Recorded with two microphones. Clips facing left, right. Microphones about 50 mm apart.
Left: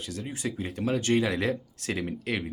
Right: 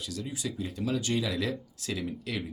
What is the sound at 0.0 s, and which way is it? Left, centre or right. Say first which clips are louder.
Speech: left 2 dB; left.